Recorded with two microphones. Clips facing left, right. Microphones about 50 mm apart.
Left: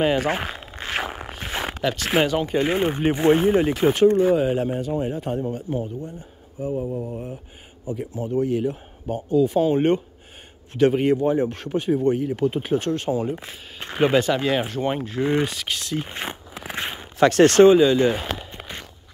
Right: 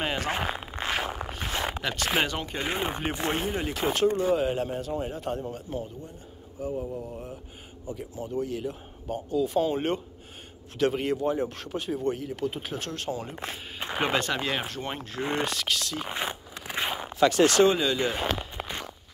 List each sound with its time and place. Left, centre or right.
0.0 s speech: centre
3.2 s speech: left
3.7 s speech: centre
6.7 s mantra: left
8.4 s speech: centre
9.1 s speech: centre
13.5 s speech: centre
14.8 s speech: centre
15.7 s speech: left
16.2 s a sound: centre
17.2 s speech: left
17.6 s speech: centre
17.9 s speech: centre
18.2 s a sound: centre